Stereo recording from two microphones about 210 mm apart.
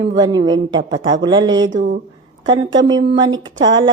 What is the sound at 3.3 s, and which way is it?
Speech, 65° right (ahead or behind).